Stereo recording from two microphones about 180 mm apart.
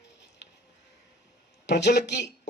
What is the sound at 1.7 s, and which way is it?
Speech, 70° left (ahead or behind).